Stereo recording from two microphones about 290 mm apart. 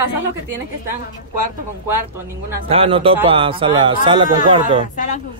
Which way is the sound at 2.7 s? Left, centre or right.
Centre.